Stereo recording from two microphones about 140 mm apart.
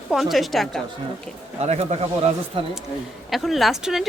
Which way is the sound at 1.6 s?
50° right (ahead or behind).